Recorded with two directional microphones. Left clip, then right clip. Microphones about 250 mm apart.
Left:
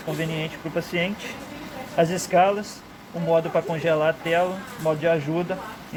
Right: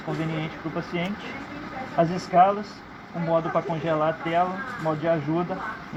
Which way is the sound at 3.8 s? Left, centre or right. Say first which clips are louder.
Left 3 dB; left.